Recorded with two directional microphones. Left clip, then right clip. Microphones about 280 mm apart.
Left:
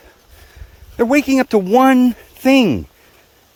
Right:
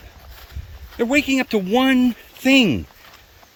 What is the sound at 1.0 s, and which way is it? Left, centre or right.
Speech, centre.